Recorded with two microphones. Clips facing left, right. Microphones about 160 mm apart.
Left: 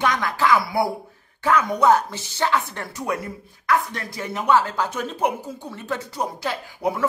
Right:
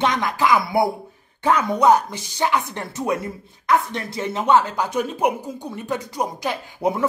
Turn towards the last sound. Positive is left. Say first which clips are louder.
# right 2 dB
turn(degrees=-20)  # may be behind; listen again after turning